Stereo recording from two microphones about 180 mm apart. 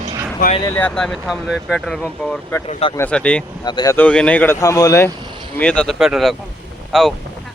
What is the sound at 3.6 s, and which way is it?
Speech, 25° left (ahead or behind).